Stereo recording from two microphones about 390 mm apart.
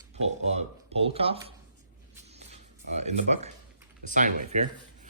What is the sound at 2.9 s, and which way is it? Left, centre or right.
Speech, centre.